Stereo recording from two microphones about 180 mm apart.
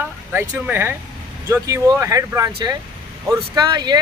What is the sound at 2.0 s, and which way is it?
Speech, 15° right (ahead or behind).